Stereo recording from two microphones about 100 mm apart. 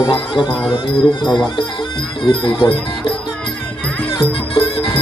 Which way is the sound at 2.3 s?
55° left (ahead or behind).